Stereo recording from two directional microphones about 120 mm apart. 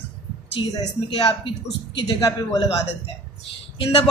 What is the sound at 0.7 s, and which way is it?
A woman's voice, 35° left (ahead or behind).